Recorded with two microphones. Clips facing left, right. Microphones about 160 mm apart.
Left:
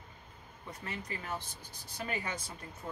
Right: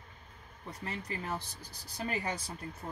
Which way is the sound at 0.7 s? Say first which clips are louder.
Right 2 dB; 35° right (ahead or behind).